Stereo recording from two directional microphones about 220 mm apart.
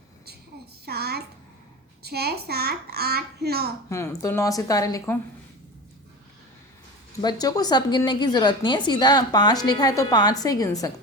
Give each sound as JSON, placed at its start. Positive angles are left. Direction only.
{"t": 0.9, "sound": "a child's voice", "side_deg": -45}
{"t": 3.8, "sound": "speech", "side_deg": 15}
{"t": 7.2, "sound": "a woman's voice", "side_deg": 20}